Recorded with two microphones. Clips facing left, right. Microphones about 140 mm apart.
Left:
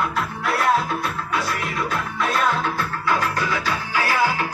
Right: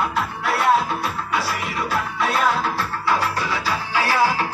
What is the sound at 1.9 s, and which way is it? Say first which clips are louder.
Music: right 3 dB; 30° right (ahead or behind).